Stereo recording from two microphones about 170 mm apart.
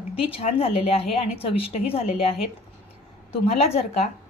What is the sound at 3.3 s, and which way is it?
Speech, 35° left (ahead or behind).